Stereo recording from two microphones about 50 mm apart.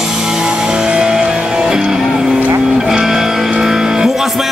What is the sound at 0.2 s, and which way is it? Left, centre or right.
Music, centre.